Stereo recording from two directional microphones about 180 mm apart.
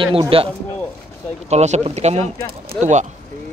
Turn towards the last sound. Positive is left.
turn(degrees=-40)  # may be behind; listen again after turning